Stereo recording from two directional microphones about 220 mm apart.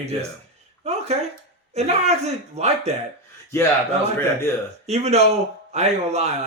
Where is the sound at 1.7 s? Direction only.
30° right (ahead or behind).